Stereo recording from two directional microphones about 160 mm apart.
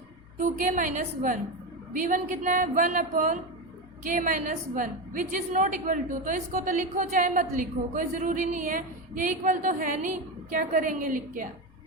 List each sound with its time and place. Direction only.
0.3 s a woman's voice: 55° right (ahead or behind)